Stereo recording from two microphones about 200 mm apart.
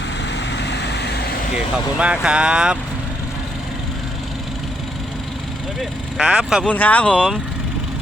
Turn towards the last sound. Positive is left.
turn(degrees=5)  # may be behind; listen again after turning